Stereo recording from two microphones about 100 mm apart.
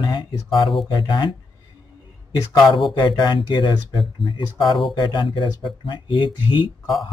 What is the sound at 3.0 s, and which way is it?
Speech, 50° left (ahead or behind).